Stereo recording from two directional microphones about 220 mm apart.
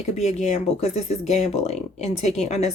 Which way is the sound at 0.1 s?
30° left (ahead or behind).